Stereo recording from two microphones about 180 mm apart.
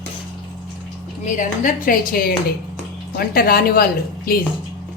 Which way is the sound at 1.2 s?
45° left (ahead or behind).